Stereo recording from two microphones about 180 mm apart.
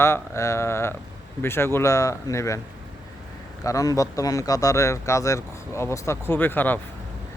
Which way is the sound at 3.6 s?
20° left (ahead or behind).